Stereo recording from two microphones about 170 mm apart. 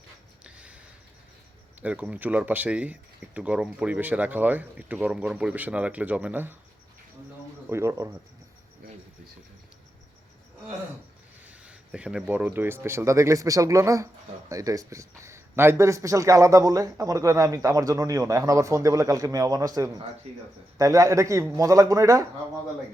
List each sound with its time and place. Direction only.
0.4 s a sound: 5° right (ahead or behind)
1.8 s speech: 5° right (ahead or behind)
7.7 s speech: 15° right (ahead or behind)
11.4 s speech: 10° right (ahead or behind)